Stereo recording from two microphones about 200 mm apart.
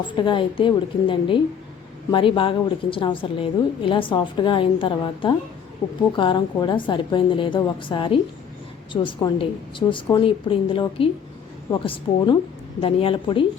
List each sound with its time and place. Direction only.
0.2 s a woman's voice: 25° left (ahead or behind)